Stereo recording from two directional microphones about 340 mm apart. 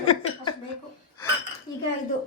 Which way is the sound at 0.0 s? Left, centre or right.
Centre.